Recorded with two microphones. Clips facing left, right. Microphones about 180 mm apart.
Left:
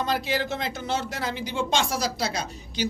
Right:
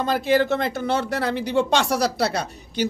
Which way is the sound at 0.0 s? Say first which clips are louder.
Right 7 dB; 55° right (ahead or behind).